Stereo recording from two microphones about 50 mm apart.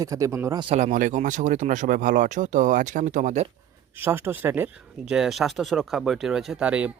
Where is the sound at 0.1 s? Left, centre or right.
Right.